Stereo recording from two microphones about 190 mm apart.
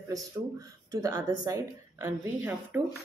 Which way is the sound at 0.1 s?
20° right (ahead or behind).